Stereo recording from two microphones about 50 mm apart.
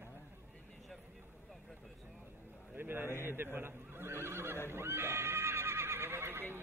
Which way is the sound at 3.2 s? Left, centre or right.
Right.